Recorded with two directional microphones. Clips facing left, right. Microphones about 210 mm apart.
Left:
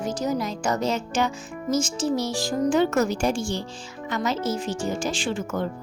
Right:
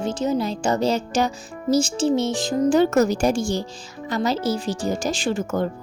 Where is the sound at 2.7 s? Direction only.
40° right (ahead or behind).